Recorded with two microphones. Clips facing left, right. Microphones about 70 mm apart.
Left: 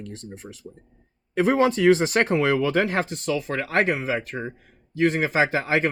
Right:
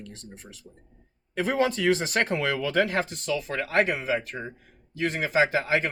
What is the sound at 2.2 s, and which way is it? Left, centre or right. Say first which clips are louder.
Speech: left 6 dB; left.